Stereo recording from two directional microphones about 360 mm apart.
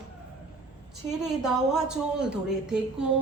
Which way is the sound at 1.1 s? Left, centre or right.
Centre.